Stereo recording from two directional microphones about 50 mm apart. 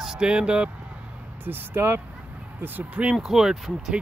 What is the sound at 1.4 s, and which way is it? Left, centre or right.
Speech, right.